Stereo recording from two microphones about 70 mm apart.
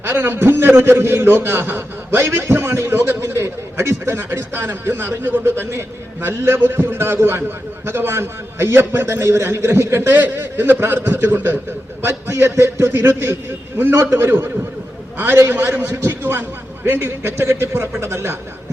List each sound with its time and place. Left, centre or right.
0.0 s a man's voice: right
10.1 s a man's voice: right
15.6 s a man's voice: right